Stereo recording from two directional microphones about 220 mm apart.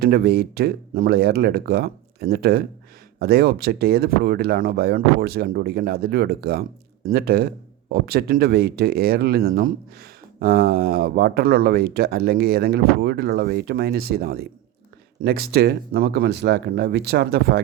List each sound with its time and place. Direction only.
0.0 s speech: 45° right (ahead or behind)